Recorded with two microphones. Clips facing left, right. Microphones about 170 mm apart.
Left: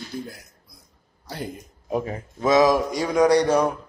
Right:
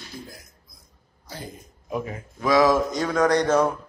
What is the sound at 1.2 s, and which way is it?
Speech, 65° left (ahead or behind).